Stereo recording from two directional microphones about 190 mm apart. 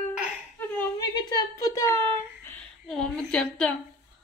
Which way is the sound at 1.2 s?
20° left (ahead or behind).